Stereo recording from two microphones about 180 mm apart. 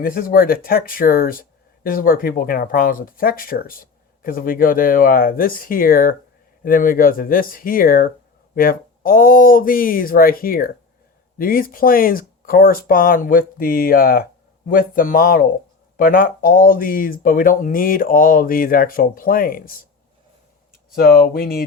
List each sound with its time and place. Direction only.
0.0 s speech: 55° left (ahead or behind)
20.9 s speech: 55° left (ahead or behind)